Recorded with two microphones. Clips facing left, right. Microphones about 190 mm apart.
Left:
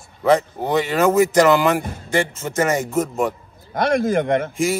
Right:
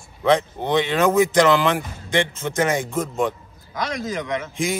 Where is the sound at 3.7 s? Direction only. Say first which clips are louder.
Left 8 dB; 55° left (ahead or behind).